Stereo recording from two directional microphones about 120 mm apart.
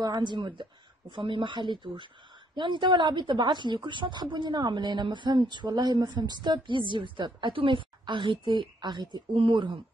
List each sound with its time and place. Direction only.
0.0 s a woman's voice: 35° right (ahead or behind)